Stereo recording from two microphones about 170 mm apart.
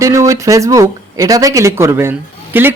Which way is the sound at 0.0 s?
20° right (ahead or behind).